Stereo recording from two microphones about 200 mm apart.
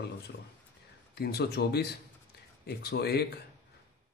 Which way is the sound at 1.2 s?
55° left (ahead or behind).